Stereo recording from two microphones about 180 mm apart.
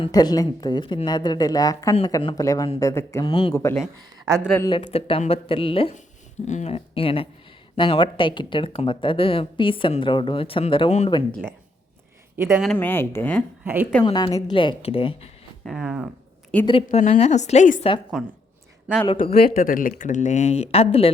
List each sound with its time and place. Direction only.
0.0 s speech: 20° left (ahead or behind)
4.7 s speech: 30° left (ahead or behind)
12.4 s speech: 15° right (ahead or behind)
12.7 s speech: 10° left (ahead or behind)
14.0 s speech: 20° left (ahead or behind)
15.6 s speech: 5° right (ahead or behind)
16.6 s speech: 30° left (ahead or behind)
18.1 s speech: 5° right (ahead or behind)
19.3 s speech: 55° left (ahead or behind); by 21.1 s 35° left (ahead or behind)